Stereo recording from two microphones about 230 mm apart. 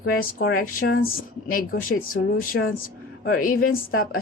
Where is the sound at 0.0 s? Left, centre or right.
Left.